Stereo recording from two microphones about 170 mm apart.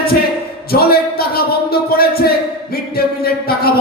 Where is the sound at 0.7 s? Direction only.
65° left (ahead or behind).